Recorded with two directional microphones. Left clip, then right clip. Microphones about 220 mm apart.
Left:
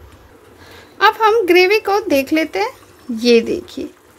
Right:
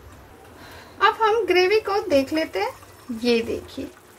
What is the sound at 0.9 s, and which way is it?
A woman's voice, 45° left (ahead or behind).